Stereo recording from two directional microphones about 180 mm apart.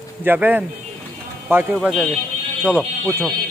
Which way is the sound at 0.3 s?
10° right (ahead or behind).